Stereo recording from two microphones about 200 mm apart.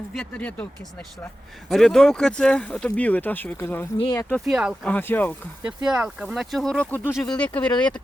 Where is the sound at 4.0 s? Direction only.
20° left (ahead or behind).